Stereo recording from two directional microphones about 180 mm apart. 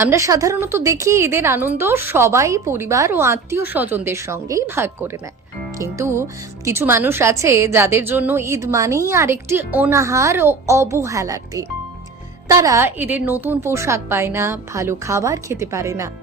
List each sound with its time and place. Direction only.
0.0 s a woman's voice: 15° right (ahead or behind)